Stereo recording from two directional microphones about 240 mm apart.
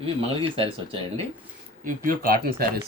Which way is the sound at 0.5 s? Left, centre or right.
Right.